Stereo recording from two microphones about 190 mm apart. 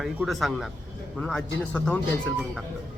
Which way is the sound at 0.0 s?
Centre (ahead or behind).